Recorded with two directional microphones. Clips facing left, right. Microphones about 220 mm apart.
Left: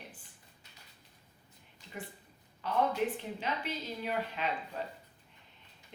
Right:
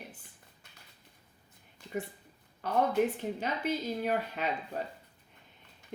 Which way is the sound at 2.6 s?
50° right (ahead or behind).